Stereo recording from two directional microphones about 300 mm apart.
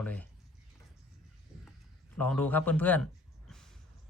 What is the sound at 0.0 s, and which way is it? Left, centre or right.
Speech, centre.